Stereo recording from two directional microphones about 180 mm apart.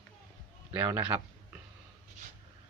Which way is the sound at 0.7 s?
10° right (ahead or behind).